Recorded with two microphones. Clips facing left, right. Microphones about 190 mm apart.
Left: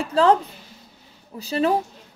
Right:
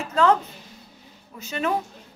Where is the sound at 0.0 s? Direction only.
30° left (ahead or behind).